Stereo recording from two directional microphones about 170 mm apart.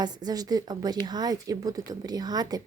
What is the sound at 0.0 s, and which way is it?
Speech, 25° right (ahead or behind).